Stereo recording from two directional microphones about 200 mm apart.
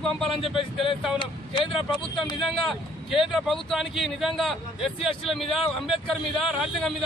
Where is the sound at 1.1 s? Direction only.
25° left (ahead or behind).